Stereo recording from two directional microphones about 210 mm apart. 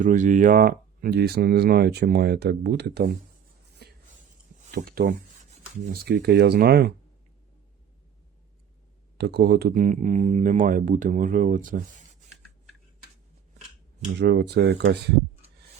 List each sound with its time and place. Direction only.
0.0 s speech: 35° right (ahead or behind)
3.8 s a sound: 50° right (ahead or behind)
4.7 s speech: 45° right (ahead or behind)
9.1 s speech: 50° right (ahead or behind)
14.2 s speech: 55° right (ahead or behind)